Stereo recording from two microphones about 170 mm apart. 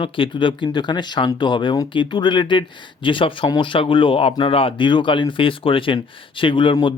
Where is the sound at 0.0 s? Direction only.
30° left (ahead or behind).